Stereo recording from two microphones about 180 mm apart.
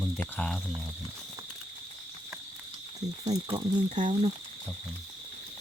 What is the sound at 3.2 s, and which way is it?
Speech, 35° right (ahead or behind).